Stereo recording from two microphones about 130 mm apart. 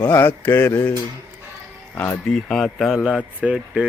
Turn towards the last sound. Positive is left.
turn(degrees=-5)  # may be behind; listen again after turning